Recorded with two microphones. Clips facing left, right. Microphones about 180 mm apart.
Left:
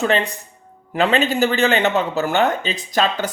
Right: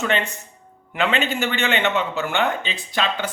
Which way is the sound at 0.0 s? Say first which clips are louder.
Left 4 dB; 35° left (ahead or behind).